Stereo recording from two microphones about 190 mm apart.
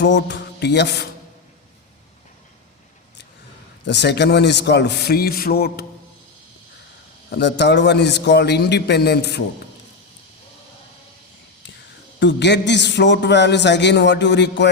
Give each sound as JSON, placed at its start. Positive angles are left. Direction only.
{"t": 0.0, "sound": "a sound", "side_deg": 65}
{"t": 3.8, "sound": "a man's voice", "side_deg": 65}
{"t": 7.3, "sound": "a man's voice", "side_deg": 60}
{"t": 12.2, "sound": "a man's voice", "side_deg": 65}